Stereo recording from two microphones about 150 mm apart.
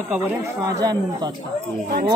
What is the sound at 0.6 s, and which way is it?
Speech, 25° right (ahead or behind).